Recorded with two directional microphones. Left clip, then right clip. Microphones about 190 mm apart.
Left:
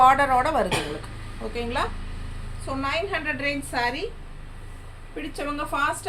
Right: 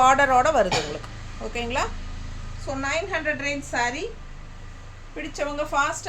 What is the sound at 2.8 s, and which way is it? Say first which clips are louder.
A woman's voice: right 1 dB; 15° right (ahead or behind).